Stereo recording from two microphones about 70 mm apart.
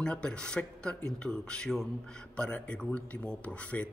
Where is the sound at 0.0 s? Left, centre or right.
Centre.